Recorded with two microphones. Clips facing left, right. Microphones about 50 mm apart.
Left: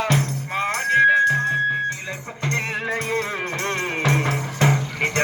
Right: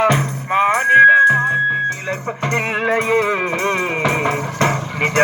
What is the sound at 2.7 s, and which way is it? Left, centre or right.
Music, right.